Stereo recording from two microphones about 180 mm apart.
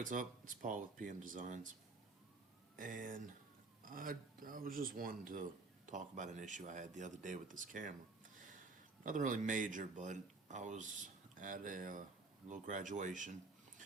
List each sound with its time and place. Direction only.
0.0 s speech: 45° right (ahead or behind)
2.7 s speech: 50° right (ahead or behind)
9.0 s speech: 45° right (ahead or behind)